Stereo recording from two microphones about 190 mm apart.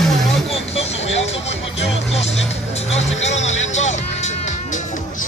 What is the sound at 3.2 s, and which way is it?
Music, 35° left (ahead or behind).